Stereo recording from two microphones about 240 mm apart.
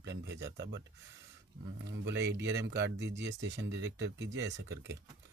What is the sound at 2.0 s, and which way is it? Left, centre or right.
Speech, right.